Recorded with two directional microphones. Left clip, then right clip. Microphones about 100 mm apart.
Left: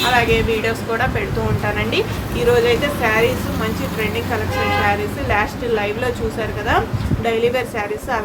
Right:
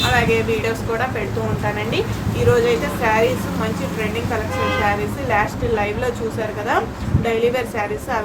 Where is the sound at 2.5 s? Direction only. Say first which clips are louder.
Left 2 dB; 15° left (ahead or behind).